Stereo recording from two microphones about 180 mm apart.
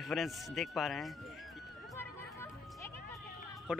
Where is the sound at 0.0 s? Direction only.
Centre (ahead or behind).